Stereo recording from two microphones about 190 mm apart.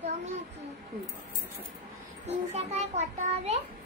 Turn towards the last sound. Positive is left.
turn(degrees=-35)  # may be behind; listen again after turning